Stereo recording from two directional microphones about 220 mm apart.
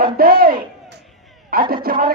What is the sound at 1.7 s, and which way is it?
Speech, 40° right (ahead or behind).